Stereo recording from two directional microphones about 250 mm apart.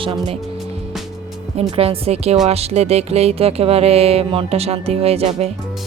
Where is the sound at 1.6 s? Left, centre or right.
Right.